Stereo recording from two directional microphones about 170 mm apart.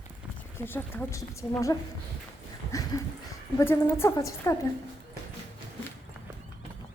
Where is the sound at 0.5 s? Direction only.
15° left (ahead or behind).